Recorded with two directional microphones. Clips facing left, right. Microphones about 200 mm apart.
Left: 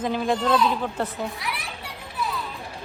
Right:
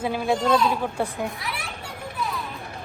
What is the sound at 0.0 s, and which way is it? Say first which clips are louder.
A man's voice: even; 10° right (ahead or behind).